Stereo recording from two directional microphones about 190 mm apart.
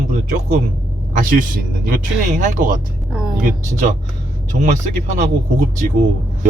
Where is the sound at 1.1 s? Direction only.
45° right (ahead or behind).